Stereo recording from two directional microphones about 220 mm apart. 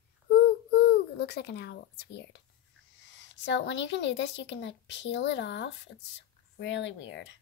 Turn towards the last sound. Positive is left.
turn(degrees=55)  # may be behind; listen again after turning